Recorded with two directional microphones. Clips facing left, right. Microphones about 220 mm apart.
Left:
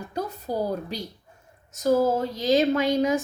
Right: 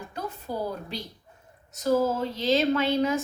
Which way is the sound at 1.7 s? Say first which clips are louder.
Left 3 dB; 45° left (ahead or behind).